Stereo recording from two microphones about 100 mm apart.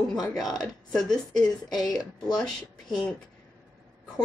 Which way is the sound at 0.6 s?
5° left (ahead or behind).